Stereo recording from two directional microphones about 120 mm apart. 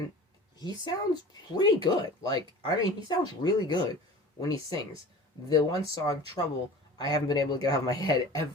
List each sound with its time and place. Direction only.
0.6 s speech: 35° left (ahead or behind)